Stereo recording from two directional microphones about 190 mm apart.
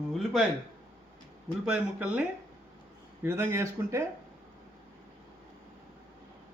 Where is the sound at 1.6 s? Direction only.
5° right (ahead or behind).